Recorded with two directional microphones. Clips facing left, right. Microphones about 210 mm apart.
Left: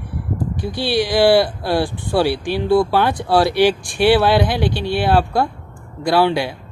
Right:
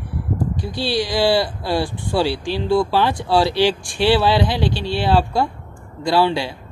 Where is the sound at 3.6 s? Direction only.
20° left (ahead or behind).